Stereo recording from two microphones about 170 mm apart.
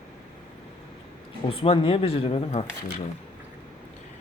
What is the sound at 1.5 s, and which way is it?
Speech, 35° left (ahead or behind).